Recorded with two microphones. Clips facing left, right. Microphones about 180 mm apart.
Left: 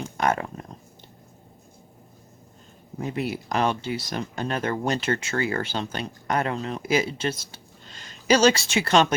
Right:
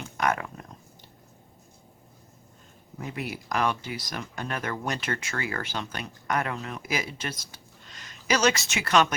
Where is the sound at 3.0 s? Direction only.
30° left (ahead or behind).